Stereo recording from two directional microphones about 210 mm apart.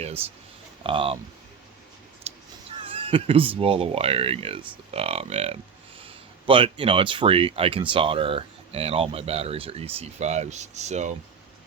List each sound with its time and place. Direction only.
0.9 s speech: 25° right (ahead or behind)
2.3 s a sound: 30° right (ahead or behind)
2.8 s speech: 25° right (ahead or behind)